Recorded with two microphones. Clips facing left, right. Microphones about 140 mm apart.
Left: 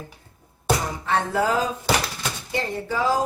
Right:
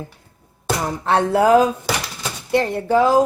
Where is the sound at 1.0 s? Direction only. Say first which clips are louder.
Right 8 dB; 70° right (ahead or behind).